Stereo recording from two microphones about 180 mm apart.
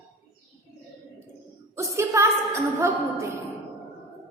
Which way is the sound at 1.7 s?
15° right (ahead or behind).